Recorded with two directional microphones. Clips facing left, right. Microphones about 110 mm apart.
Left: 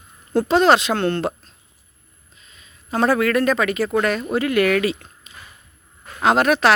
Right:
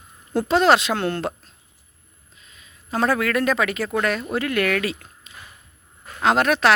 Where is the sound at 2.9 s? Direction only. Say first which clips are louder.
Left 3 dB; centre (ahead or behind).